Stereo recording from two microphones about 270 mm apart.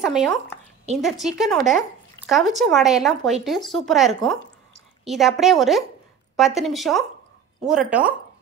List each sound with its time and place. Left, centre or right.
0.0 s speech: centre